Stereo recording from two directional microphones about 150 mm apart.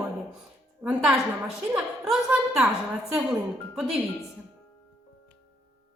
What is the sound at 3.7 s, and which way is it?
Speech, 5° right (ahead or behind).